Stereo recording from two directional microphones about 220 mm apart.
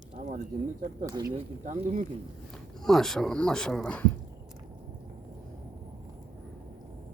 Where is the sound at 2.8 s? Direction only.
Centre (ahead or behind).